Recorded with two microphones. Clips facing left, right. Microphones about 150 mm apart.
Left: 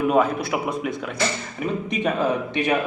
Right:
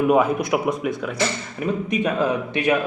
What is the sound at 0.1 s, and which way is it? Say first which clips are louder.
Speech: right 2 dB; 15° right (ahead or behind).